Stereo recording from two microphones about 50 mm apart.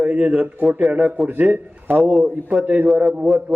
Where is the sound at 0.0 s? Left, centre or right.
Right.